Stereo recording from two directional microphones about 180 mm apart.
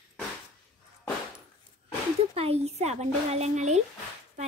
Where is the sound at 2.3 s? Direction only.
35° right (ahead or behind).